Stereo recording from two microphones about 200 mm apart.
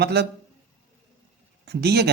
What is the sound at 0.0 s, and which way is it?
Speech, 55° right (ahead or behind).